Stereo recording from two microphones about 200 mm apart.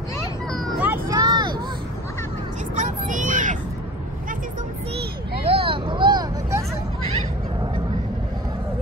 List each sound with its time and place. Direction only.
0.7 s vehicle: 10° right (ahead or behind)
1.1 s vehicle: 20° right (ahead or behind)
2.8 s vehicle: 40° right (ahead or behind)
5.5 s vehicle: 25° right (ahead or behind)